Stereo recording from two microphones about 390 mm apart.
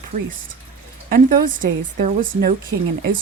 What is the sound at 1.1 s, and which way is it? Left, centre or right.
Speech, right.